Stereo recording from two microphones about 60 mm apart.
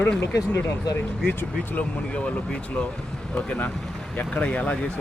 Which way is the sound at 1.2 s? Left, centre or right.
Left.